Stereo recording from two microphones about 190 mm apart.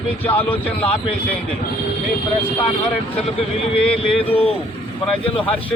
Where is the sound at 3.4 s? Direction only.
30° left (ahead or behind).